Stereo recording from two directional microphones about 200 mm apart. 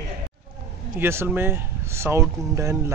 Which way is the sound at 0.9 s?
10° right (ahead or behind).